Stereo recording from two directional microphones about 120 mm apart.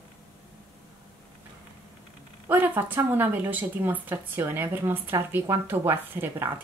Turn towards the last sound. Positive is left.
turn(degrees=-20)  # may be behind; listen again after turning